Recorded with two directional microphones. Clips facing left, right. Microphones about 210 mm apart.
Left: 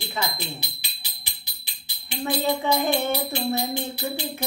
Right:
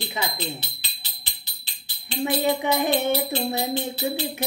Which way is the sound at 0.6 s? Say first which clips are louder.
Left 1 dB; 15° left (ahead or behind).